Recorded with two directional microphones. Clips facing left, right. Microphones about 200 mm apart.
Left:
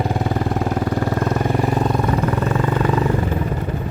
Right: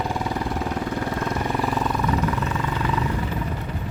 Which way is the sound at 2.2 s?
50° left (ahead or behind).